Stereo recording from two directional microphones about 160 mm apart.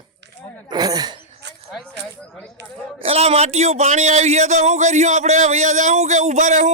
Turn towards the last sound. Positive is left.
turn(degrees=-50)  # may be behind; listen again after turning